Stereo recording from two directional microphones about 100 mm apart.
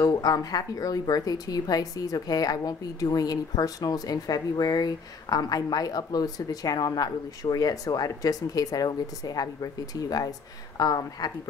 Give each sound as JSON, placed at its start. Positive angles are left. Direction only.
{"t": 0.0, "sound": "speech", "side_deg": 40}